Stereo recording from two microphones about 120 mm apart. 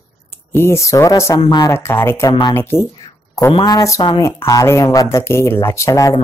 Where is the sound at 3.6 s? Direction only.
30° left (ahead or behind).